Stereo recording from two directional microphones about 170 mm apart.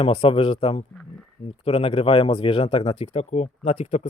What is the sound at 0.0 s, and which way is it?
Speech, 35° left (ahead or behind).